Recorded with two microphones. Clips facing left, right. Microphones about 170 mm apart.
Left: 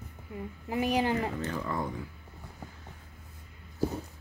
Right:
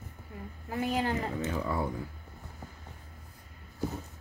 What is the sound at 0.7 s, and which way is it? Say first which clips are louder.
Speech: left 3 dB; 15° left (ahead or behind).